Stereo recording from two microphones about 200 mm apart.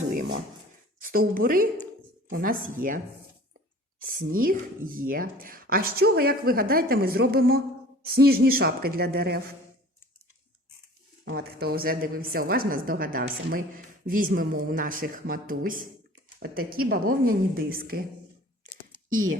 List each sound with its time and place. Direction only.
1.1 s a woman's voice: 45° right (ahead or behind)
4.1 s a woman's voice: 45° right (ahead or behind)
11.3 s a woman's voice: 50° right (ahead or behind)